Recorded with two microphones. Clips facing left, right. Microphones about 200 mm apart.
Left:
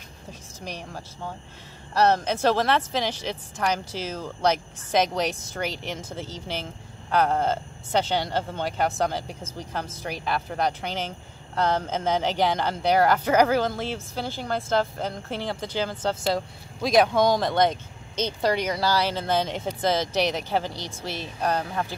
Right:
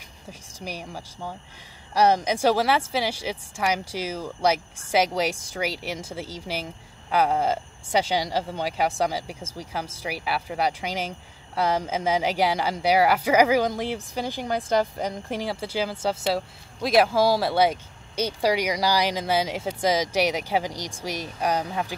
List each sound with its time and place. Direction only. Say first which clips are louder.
0.3 s speech: right 1 dB; 10° right (ahead or behind)